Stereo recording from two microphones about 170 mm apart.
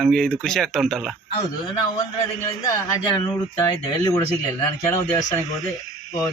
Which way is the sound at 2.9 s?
25° left (ahead or behind).